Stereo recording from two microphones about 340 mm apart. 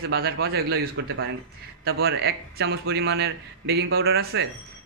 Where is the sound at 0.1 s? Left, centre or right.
Right.